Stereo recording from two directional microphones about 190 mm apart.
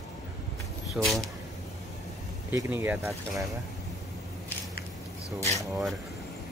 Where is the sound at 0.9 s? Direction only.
Centre (ahead or behind).